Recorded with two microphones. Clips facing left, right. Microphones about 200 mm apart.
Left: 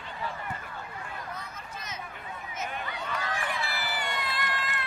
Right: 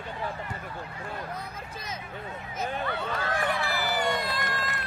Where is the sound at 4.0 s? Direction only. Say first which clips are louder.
Right 6 dB; 40° right (ahead or behind).